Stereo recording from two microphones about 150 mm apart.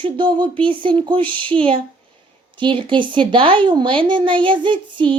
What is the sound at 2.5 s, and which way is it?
Speech, 35° right (ahead or behind).